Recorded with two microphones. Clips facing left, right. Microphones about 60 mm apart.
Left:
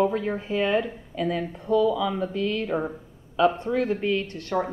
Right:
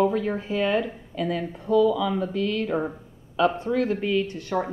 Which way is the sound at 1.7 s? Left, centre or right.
Centre.